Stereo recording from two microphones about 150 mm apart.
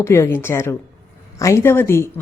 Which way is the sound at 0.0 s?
15° left (ahead or behind).